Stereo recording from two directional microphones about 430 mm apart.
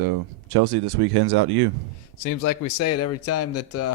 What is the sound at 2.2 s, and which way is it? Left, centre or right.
Speech, left.